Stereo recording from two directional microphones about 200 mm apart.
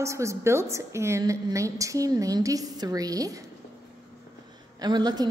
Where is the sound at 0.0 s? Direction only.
15° right (ahead or behind).